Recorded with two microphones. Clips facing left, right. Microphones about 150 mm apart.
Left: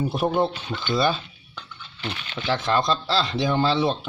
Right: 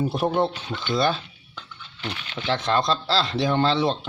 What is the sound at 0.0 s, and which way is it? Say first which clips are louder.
Speech: even; centre (ahead or behind).